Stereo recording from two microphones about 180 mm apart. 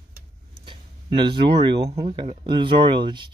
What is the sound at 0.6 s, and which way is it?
Speech, 25° right (ahead or behind).